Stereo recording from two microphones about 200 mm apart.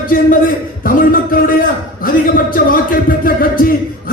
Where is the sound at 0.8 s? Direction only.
45° left (ahead or behind).